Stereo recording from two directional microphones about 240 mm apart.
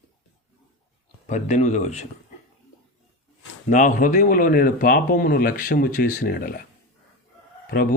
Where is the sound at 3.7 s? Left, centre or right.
Left.